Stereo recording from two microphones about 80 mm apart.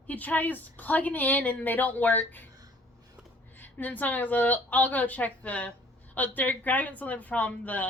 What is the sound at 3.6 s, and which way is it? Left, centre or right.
A woman's voice, left.